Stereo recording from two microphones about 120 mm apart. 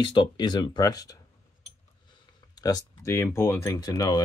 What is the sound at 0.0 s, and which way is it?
Speech, 40° left (ahead or behind).